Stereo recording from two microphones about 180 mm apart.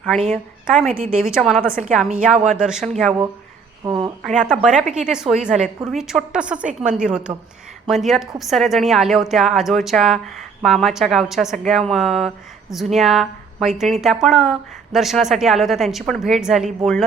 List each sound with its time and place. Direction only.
1.1 s a woman's voice: centre (ahead or behind)
3.8 s a sound: 25° right (ahead or behind)
4.4 s a woman's voice: 5° right (ahead or behind)